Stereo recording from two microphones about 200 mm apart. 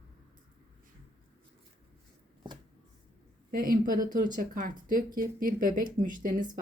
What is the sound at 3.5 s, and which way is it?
A woman's voice, 45° right (ahead or behind).